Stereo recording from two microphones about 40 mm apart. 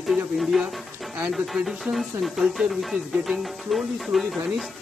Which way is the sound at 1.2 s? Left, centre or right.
Centre.